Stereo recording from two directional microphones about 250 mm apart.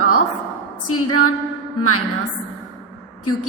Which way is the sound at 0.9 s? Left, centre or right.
Left.